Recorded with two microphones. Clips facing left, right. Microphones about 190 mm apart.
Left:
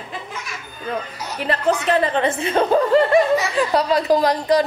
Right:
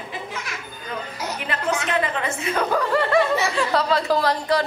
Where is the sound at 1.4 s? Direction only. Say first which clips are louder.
Left 7 dB; 35° left (ahead or behind).